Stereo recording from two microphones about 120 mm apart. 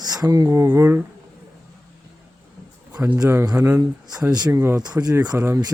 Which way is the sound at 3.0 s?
15° right (ahead or behind).